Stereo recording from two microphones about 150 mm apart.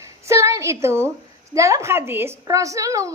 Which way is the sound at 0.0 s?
20° right (ahead or behind).